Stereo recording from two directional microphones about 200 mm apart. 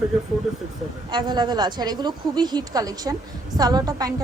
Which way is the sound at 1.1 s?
20° right (ahead or behind).